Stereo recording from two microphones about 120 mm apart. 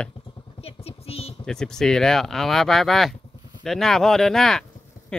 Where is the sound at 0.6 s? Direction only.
55° left (ahead or behind).